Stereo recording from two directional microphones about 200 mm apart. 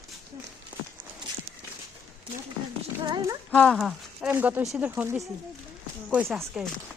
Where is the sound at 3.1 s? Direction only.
20° right (ahead or behind).